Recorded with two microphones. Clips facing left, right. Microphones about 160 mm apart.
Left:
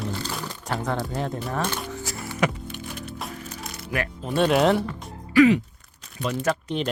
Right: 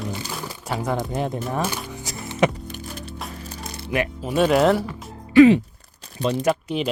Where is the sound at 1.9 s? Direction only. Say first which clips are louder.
Right 4 dB; 20° right (ahead or behind).